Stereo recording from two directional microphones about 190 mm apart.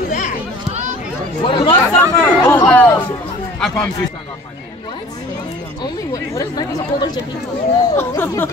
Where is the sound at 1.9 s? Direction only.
10° left (ahead or behind).